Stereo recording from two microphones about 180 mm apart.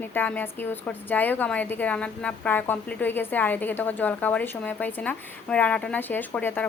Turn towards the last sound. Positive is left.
turn(degrees=10)  # may be behind; listen again after turning